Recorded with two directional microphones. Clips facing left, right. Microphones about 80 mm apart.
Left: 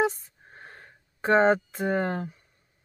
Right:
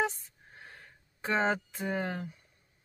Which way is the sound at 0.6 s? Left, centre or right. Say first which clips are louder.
Left 4 dB; left.